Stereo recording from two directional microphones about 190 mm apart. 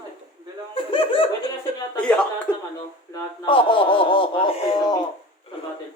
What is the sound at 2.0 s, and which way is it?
Speech, 5° left (ahead or behind).